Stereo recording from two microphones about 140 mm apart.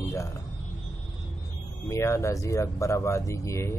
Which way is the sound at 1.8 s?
20° left (ahead or behind).